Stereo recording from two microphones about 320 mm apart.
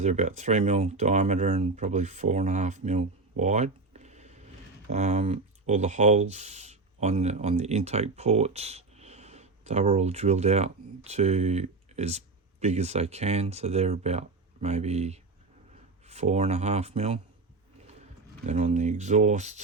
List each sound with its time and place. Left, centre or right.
0.0 s speech: right
18.4 s speech: right